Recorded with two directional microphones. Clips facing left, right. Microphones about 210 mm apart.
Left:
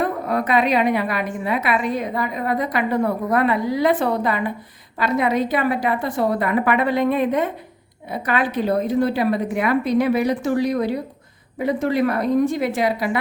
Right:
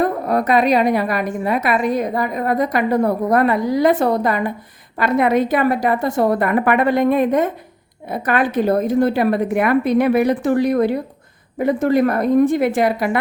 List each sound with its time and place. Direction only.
0.0 s a woman's voice: 40° right (ahead or behind)
4.9 s a woman's voice: 55° right (ahead or behind)